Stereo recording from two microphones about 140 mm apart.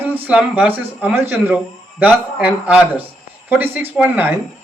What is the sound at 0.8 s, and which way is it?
Speech, 15° right (ahead or behind).